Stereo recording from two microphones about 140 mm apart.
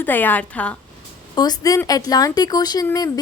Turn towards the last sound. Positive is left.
turn(degrees=25)  # may be behind; listen again after turning